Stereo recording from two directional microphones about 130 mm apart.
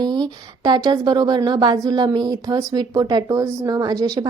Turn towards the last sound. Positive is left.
turn(degrees=-30)  # may be behind; listen again after turning